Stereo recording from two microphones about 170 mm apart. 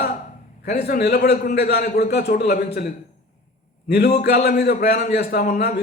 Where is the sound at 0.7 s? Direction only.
70° left (ahead or behind).